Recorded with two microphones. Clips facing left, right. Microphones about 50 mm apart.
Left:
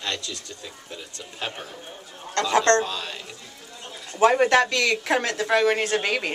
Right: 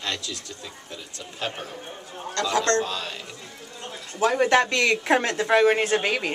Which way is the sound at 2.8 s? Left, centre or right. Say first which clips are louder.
Even; centre.